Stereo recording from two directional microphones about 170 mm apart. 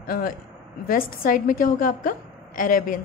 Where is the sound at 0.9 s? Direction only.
55° left (ahead or behind).